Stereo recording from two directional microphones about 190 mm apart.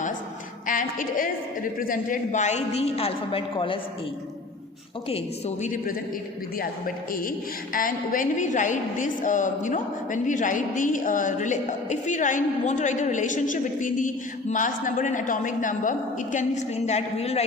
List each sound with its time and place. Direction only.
0.7 s a woman's voice: 45° left (ahead or behind); by 3.8 s 30° left (ahead or behind)
5.0 s a man's voice: 35° left (ahead or behind)